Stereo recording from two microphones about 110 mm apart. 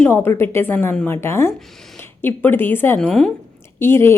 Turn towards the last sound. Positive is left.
turn(degrees=25)  # may be behind; listen again after turning